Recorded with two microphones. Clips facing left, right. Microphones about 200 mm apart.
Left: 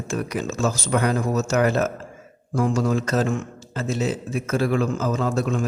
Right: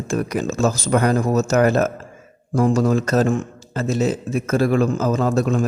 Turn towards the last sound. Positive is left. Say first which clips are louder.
# right 4 dB
turn(degrees=-40)  # may be behind; listen again after turning